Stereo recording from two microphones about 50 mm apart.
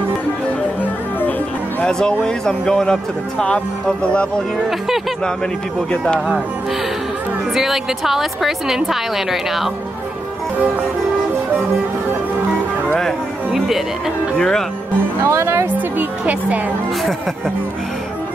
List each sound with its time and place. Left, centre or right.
1.8 s speech: centre
4.6 s a woman's voice: centre
5.9 s speech: centre
7.5 s a woman's voice: centre
14.3 s speech: centre
15.2 s speech: right
15.6 s a woman's voice: right